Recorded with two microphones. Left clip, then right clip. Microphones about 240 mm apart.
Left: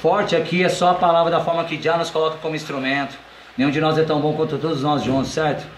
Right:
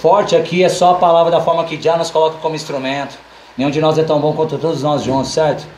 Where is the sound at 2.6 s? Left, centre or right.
Centre.